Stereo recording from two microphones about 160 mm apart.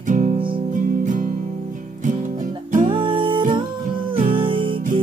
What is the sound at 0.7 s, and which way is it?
Music, 55° right (ahead or behind).